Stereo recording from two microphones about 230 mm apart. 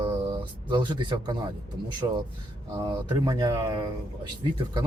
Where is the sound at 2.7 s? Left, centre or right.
Centre.